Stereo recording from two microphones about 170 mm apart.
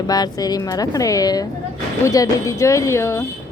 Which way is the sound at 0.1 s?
20° left (ahead or behind).